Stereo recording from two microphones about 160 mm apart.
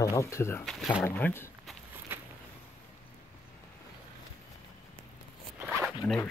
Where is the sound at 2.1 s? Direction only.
15° right (ahead or behind).